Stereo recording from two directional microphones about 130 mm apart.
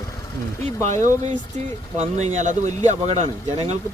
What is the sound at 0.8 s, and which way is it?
Speech, 70° right (ahead or behind).